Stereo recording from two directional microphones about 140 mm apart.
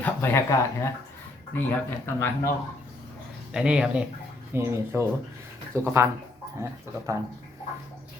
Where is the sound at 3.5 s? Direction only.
5° right (ahead or behind).